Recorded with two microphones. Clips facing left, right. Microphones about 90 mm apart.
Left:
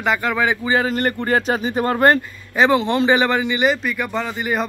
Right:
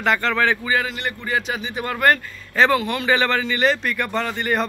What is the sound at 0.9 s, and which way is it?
A man's voice, 45° left (ahead or behind).